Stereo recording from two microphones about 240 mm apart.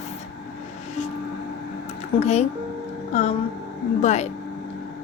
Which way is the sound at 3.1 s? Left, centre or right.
Left.